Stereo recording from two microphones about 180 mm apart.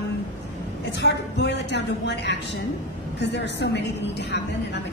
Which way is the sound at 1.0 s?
70° left (ahead or behind).